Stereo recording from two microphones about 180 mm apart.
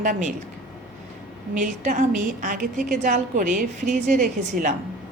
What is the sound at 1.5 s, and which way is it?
A woman's voice, 45° right (ahead or behind).